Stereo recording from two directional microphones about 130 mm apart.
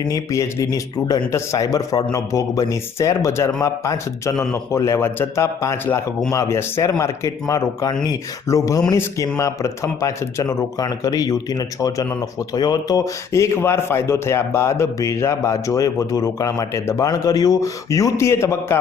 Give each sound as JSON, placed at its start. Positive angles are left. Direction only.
{"t": 0.0, "sound": "speech", "side_deg": 25}